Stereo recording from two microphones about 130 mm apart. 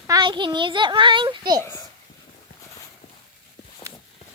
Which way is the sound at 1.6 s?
20° left (ahead or behind).